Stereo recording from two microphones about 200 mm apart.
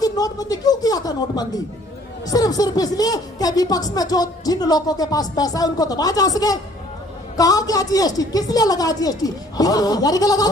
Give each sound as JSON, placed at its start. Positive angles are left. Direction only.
{"t": 0.0, "sound": "a woman's voice", "side_deg": 20}